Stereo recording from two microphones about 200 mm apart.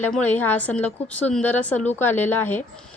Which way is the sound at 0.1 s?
5° left (ahead or behind).